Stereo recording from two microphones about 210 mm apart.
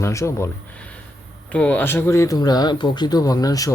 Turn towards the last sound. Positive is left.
turn(degrees=15)  # may be behind; listen again after turning